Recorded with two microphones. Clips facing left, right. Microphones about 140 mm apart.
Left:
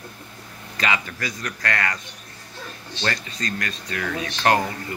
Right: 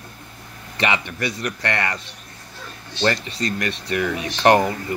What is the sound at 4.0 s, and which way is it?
Speech, 20° right (ahead or behind).